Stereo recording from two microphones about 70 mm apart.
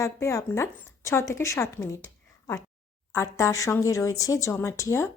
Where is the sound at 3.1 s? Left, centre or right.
Left.